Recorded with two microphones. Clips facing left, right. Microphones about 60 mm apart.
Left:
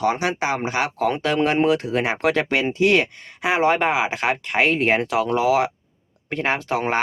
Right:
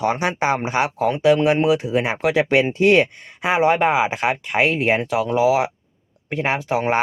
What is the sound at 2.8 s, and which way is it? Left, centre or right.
Speech, right.